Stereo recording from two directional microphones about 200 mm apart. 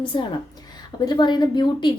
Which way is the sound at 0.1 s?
25° left (ahead or behind).